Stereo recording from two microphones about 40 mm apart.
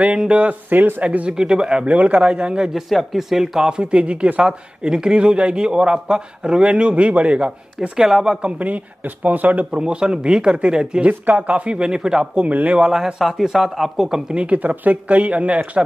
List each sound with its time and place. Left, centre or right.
0.5 s speech: right
1.0 s speech: right
1.5 s a man's voice: right
1.9 s a man's voice: right
2.7 s a man's voice: centre; by 7.9 s right
8.0 s speech: centre
8.4 s a man's voice: right
9.2 s speech: right
9.8 s a man's voice: right
11.1 s a man's voice: right; by 12.3 s centre
12.4 s speech: right
12.7 s speech: centre
13.2 s speech: centre
14.3 s speech: right